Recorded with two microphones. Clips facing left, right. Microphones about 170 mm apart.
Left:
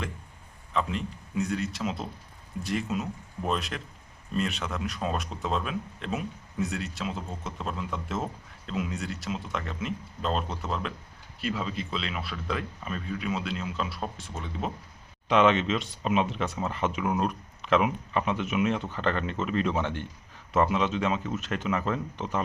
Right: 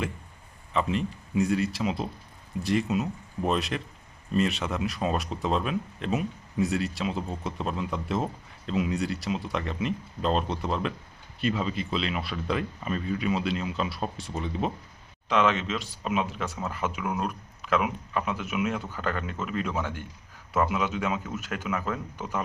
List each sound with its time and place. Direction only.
0.7 s speech: centre (ahead or behind)